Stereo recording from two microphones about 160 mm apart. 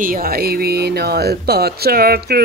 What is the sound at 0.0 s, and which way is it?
Speech, 65° right (ahead or behind).